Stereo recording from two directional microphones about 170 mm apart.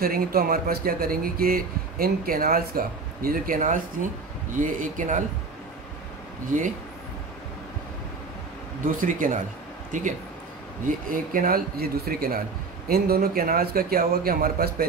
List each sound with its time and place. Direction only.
0.0 s speech: 60° right (ahead or behind)
8.8 s speech: 55° right (ahead or behind)